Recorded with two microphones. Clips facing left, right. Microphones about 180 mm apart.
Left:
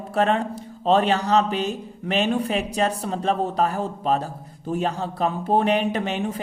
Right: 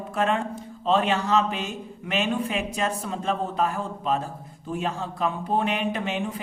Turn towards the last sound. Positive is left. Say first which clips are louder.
# left 3 dB
turn(degrees=40)  # may be behind; listen again after turning